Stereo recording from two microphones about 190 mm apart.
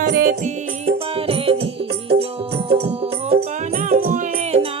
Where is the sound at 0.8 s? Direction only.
30° right (ahead or behind).